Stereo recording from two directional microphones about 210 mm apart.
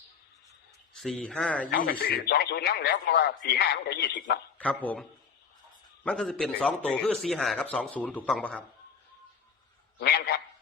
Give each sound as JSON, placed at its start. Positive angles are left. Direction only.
{"t": 1.0, "sound": "speech", "side_deg": 5}
{"t": 1.7, "sound": "speech", "side_deg": 45}
{"t": 4.5, "sound": "a man's voice", "side_deg": 5}
{"t": 6.1, "sound": "speech", "side_deg": 5}
{"t": 10.0, "sound": "speech", "side_deg": 50}